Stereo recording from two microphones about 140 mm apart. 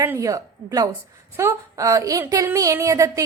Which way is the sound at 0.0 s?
20° right (ahead or behind).